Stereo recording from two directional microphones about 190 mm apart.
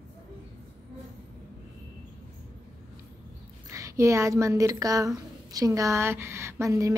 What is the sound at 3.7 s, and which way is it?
A woman's voice, 15° right (ahead or behind).